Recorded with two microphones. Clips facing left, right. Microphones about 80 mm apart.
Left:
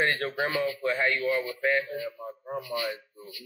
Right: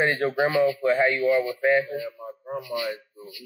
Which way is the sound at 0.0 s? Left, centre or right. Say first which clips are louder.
Right 5 dB; centre.